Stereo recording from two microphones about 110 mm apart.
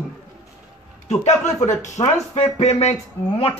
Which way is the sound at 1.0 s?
90° left.